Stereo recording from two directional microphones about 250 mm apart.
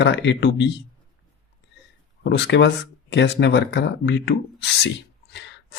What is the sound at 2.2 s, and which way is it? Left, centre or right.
Speech, left.